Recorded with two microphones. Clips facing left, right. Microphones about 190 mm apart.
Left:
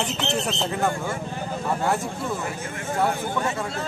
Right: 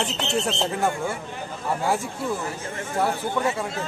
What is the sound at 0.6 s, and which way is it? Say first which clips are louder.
Speech: even; 10° right (ahead or behind).